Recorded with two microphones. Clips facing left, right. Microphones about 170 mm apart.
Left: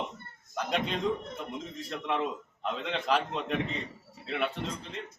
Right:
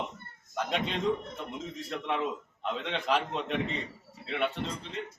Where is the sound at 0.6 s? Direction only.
Centre (ahead or behind).